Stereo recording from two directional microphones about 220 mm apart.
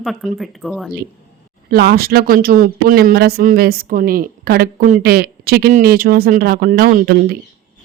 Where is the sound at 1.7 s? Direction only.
45° right (ahead or behind).